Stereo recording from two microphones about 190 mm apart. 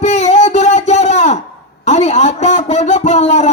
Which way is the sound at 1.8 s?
35° left (ahead or behind).